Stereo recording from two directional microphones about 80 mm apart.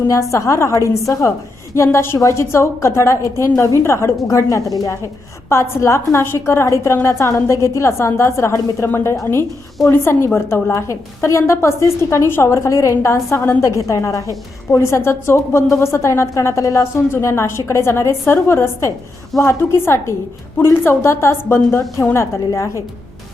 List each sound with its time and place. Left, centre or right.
0.1 s a woman's voice: left